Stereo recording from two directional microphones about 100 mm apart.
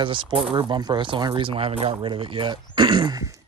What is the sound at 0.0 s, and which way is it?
Speech, 55° right (ahead or behind).